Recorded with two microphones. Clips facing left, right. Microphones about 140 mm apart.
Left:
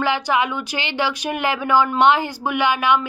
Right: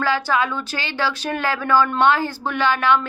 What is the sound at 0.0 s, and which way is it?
A woman's voice, 20° left (ahead or behind).